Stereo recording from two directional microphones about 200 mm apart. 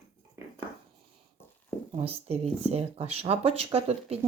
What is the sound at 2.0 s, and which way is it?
Speech, 30° right (ahead or behind).